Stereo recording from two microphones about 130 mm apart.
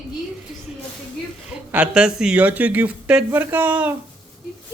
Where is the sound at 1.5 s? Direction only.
10° right (ahead or behind).